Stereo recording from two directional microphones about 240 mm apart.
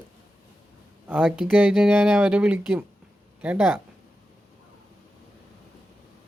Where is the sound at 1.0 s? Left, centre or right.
Centre.